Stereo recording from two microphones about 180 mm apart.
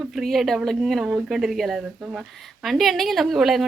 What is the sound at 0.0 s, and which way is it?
Speech, centre (ahead or behind).